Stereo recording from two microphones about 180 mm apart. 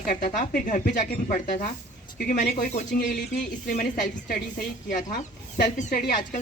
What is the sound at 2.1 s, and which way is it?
Speech, 60° left (ahead or behind).